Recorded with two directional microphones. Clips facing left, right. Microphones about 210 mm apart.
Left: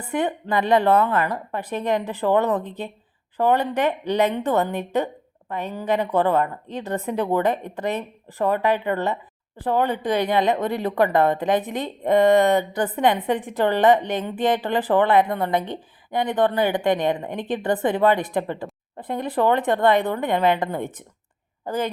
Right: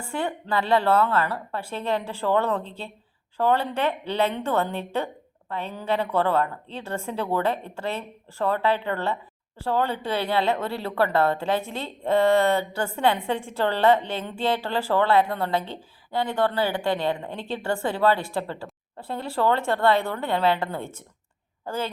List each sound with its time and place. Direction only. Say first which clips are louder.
0.1 s a woman's voice: left 4 dB; 20° left (ahead or behind)